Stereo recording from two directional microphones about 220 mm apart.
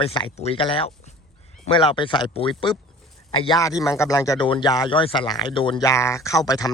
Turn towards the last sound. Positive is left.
turn(degrees=15)  # may be behind; listen again after turning